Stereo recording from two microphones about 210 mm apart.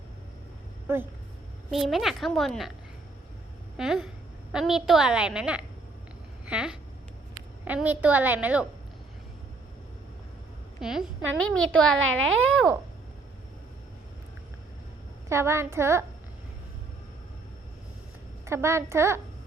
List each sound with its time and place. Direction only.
0.9 s a woman's voice: 10° right (ahead or behind)
3.8 s a woman's voice: centre (ahead or behind)
10.8 s a woman's voice: 5° right (ahead or behind)
11.9 s a child's voice: 70° right (ahead or behind)
15.3 s a woman's voice: 10° right (ahead or behind)
18.4 s a woman's voice: 15° right (ahead or behind)